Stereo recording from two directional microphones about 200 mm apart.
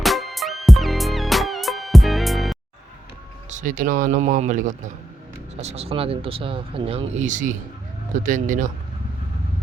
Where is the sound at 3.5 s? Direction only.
40° right (ahead or behind).